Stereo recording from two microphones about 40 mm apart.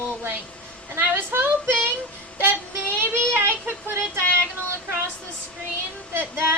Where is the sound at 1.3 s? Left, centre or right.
Right.